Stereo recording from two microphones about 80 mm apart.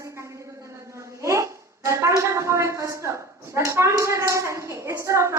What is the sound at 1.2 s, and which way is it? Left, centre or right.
Hands, right.